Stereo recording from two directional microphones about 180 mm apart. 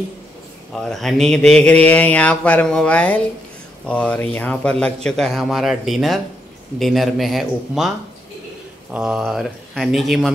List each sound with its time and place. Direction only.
0.8 s a sound: centre (ahead or behind)
3.8 s a man's voice: 10° left (ahead or behind)
8.9 s a man's voice: 5° right (ahead or behind)